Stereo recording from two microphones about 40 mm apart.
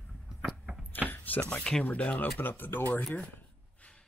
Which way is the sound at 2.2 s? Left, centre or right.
Left.